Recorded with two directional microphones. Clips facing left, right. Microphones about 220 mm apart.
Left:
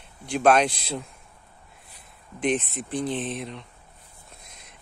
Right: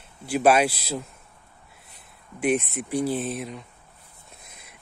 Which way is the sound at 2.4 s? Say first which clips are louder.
Right 2 dB; 10° right (ahead or behind).